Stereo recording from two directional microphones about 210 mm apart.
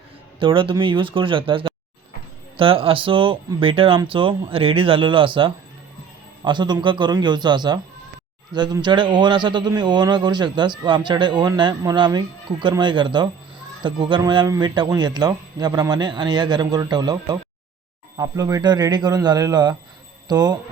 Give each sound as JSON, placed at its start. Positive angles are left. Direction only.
{"t": 0.3, "sound": "a man's voice", "side_deg": -25}